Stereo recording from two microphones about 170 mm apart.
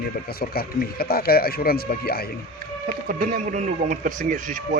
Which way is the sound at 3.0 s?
60° right (ahead or behind).